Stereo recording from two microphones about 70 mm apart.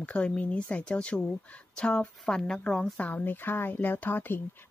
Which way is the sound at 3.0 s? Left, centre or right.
Left.